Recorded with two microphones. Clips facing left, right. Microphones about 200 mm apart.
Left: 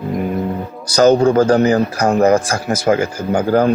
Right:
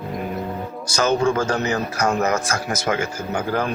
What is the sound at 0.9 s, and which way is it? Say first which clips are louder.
Speech: left 8 dB; 35° left (ahead or behind).